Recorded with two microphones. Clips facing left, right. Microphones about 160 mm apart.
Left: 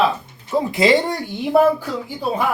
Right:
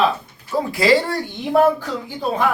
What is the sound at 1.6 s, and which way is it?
Speech, 10° left (ahead or behind).